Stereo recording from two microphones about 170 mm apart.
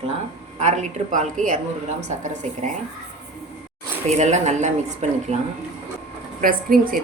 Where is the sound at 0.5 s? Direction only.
40° right (ahead or behind).